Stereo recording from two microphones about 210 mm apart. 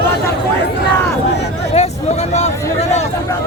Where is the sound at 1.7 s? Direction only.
30° left (ahead or behind).